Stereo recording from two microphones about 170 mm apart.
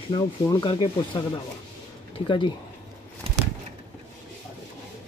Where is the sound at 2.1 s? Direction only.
30° left (ahead or behind).